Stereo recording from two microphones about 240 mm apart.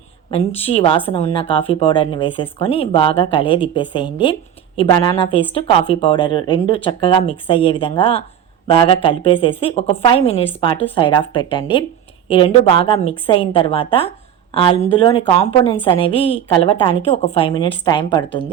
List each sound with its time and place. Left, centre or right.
0.3 s speech: left